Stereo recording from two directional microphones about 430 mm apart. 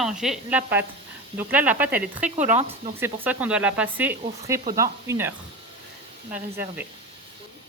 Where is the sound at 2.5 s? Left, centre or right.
Centre.